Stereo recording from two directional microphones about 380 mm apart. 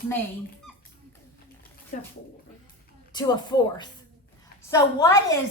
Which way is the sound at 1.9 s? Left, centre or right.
Centre.